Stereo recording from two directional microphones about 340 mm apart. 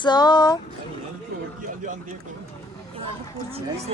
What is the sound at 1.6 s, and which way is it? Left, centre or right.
Speech, right.